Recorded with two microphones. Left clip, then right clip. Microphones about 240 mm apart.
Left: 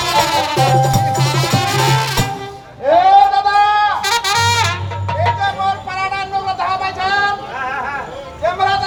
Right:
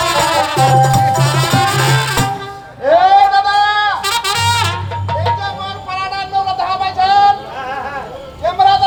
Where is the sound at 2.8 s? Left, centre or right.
Right.